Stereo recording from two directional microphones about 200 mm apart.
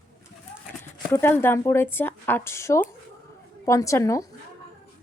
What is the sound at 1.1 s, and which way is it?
Speech, 10° left (ahead or behind).